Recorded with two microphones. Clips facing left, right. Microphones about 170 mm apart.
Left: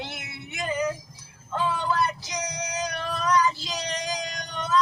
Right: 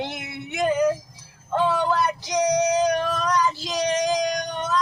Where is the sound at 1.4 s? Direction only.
55° right (ahead or behind).